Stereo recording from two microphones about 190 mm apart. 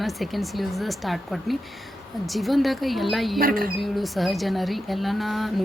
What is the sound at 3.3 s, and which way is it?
Music, 50° right (ahead or behind).